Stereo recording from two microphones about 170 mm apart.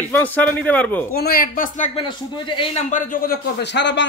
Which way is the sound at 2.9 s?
55° left (ahead or behind).